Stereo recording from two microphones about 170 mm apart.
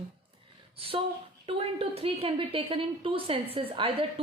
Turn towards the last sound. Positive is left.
turn(degrees=-35)  # may be behind; listen again after turning